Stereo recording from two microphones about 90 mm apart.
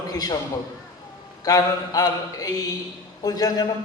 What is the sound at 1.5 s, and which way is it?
A man's voice, 40° left (ahead or behind).